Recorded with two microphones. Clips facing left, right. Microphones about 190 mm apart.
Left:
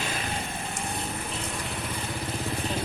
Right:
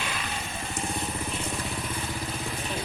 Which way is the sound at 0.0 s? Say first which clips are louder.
Left 2 dB; 45° left (ahead or behind).